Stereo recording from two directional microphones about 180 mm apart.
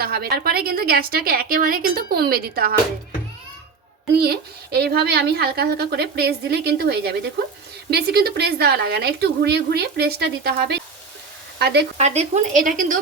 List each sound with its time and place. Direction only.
0.0 s a woman's voice: 60° right (ahead or behind)
4.1 s a woman's voice: 60° right (ahead or behind)
11.9 s speech: 35° right (ahead or behind)